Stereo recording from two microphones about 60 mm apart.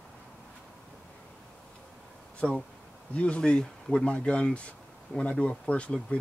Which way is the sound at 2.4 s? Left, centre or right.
Centre.